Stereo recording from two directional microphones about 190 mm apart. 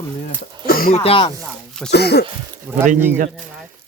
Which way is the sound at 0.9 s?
30° left (ahead or behind).